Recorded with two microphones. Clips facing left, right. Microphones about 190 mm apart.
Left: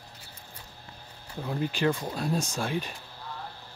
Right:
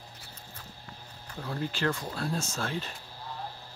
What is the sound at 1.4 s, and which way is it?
Speech, 15° left (ahead or behind).